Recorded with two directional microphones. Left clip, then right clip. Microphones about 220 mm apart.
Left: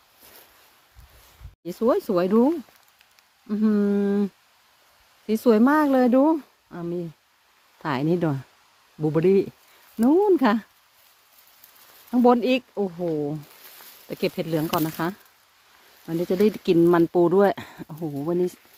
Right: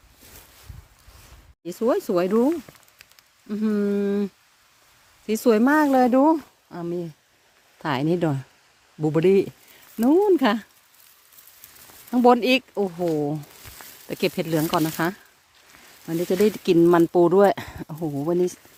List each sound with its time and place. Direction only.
1.6 s speech: 10° right (ahead or behind)
12.1 s speech: 20° right (ahead or behind)
16.0 s speech: 10° right (ahead or behind)